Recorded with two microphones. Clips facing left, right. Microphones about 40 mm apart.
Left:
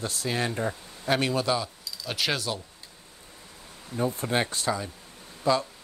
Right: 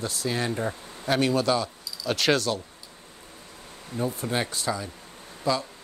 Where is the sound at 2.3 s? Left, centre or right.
Left.